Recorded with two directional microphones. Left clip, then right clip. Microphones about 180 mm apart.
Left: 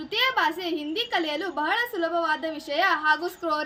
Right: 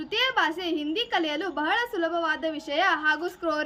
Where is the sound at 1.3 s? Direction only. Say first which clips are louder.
Even; 30° right (ahead or behind).